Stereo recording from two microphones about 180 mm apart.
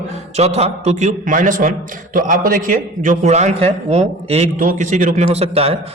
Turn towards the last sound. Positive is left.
turn(degrees=-35)  # may be behind; listen again after turning